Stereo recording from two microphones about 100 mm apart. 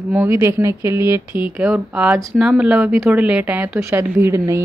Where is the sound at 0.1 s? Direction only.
25° right (ahead or behind).